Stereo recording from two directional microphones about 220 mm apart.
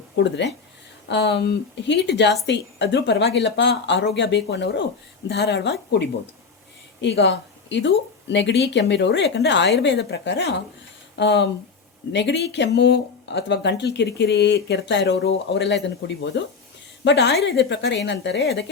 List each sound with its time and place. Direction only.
0.2 s speech: 50° left (ahead or behind)